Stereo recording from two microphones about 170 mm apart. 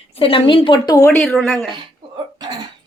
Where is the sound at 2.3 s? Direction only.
25° right (ahead or behind).